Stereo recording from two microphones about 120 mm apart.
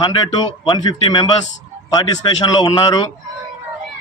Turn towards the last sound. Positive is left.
turn(degrees=40)  # may be behind; listen again after turning